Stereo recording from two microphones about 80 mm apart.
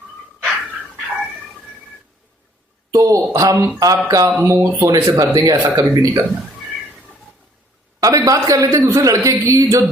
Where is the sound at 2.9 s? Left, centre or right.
Right.